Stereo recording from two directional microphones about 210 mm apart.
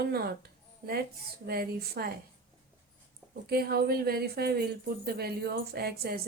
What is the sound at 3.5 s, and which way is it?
A woman's voice, 45° right (ahead or behind).